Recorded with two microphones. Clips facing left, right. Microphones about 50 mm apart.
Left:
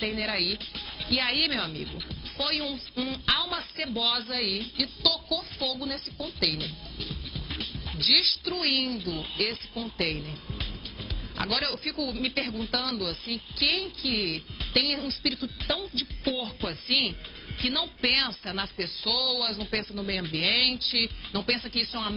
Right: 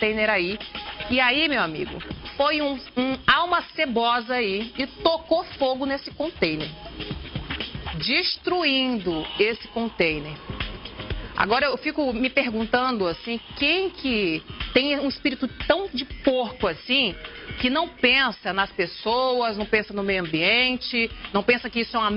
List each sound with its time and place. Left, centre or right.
0.1 s a woman's voice: right